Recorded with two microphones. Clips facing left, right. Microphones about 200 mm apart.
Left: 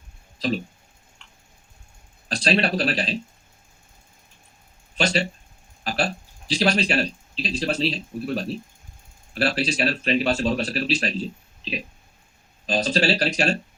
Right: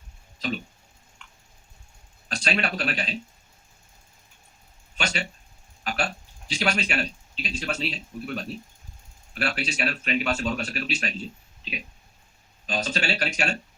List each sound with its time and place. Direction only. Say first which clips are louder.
0.3 s speech: left 5 dB; 35° left (ahead or behind)
1.2 s a sound: right 3 dB; 30° left (ahead or behind)
2.3 s speech: left 6 dB; 35° left (ahead or behind)
4.9 s speech: left 7 dB; 35° left (ahead or behind)